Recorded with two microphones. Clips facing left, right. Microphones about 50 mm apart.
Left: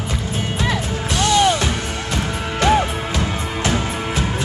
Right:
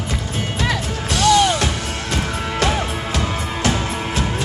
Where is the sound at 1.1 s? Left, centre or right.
Left.